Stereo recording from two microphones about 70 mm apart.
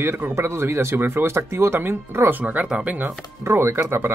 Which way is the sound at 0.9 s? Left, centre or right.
Right.